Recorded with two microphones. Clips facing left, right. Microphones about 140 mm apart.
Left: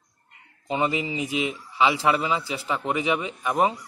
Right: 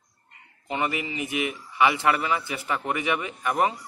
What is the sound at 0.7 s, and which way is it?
A man's voice, 20° left (ahead or behind).